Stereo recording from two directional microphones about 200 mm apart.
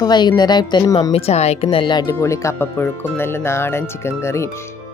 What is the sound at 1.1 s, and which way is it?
Speech, 30° left (ahead or behind).